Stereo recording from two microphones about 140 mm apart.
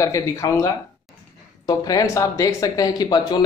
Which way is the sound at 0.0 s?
25° left (ahead or behind).